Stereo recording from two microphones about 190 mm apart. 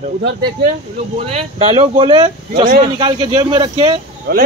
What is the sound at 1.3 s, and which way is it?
Speech, 35° right (ahead or behind).